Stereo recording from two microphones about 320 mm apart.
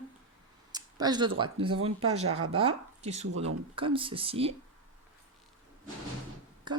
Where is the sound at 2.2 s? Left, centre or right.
Right.